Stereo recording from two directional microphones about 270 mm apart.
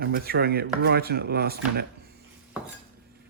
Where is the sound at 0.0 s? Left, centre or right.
Right.